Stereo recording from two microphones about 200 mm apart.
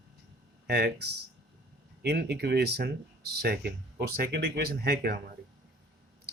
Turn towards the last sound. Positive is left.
turn(degrees=-50)  # may be behind; listen again after turning